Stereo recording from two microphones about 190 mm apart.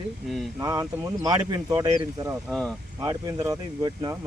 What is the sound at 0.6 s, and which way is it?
Speech, 20° right (ahead or behind).